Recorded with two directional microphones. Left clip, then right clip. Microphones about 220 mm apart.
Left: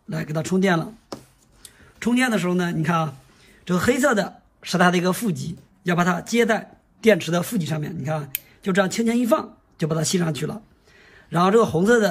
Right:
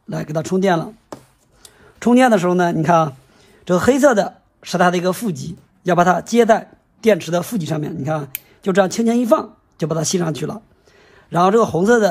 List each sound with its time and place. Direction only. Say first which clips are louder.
0.1 s a woman's voice: right 4 dB; 10° right (ahead or behind)